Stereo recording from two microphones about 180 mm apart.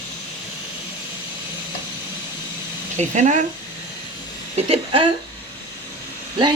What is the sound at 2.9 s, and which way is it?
Speech, 40° right (ahead or behind).